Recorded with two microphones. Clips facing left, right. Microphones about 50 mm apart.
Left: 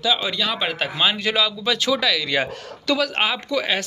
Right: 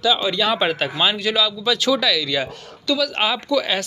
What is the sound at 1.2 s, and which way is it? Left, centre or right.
Speech, left.